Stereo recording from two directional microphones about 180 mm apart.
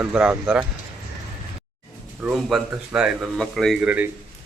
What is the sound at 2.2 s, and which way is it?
Speech, centre (ahead or behind).